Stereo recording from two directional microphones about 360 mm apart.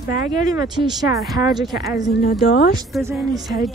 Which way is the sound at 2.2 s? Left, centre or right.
Left.